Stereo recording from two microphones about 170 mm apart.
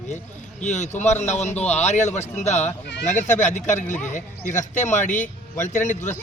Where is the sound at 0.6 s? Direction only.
45° left (ahead or behind).